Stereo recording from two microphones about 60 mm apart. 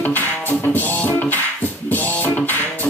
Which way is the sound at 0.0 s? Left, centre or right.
Left.